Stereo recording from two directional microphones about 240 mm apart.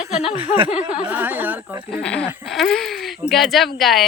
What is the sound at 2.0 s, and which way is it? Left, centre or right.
Speech, centre.